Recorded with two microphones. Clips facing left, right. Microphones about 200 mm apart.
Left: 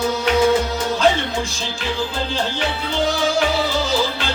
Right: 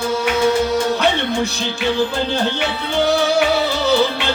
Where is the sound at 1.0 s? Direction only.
65° right (ahead or behind).